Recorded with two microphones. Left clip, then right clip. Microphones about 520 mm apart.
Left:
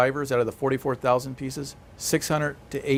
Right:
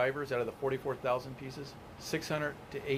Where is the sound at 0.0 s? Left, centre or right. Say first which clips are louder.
Left 10 dB; left.